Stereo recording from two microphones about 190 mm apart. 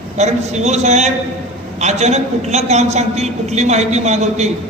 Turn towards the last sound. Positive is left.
turn(degrees=-35)  # may be behind; listen again after turning